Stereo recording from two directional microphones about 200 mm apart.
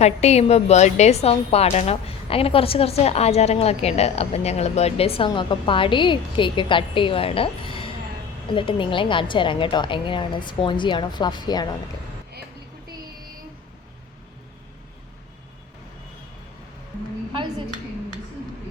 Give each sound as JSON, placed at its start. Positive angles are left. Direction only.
{"t": 0.0, "sound": "a woman's voice", "side_deg": 35}